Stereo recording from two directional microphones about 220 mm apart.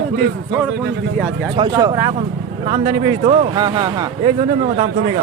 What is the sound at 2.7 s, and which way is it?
Speech, 25° right (ahead or behind).